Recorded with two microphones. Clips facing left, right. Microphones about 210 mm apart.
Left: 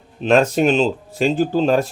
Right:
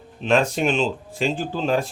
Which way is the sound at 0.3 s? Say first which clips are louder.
Left 5 dB; 40° left (ahead or behind).